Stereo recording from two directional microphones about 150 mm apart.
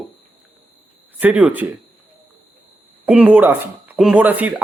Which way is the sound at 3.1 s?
10° right (ahead or behind).